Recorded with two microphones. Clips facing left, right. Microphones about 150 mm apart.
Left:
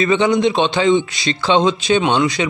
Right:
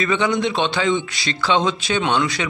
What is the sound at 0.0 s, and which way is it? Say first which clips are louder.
A man's voice: left 5 dB; 25° left (ahead or behind).